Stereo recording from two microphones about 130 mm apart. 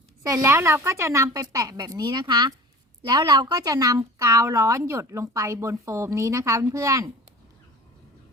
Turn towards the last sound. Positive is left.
turn(degrees=-25)  # may be behind; listen again after turning